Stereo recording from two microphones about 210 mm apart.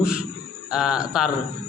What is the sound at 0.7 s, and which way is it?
Speech, 5° right (ahead or behind).